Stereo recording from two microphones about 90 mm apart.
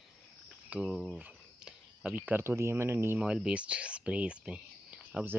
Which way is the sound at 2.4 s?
30° right (ahead or behind).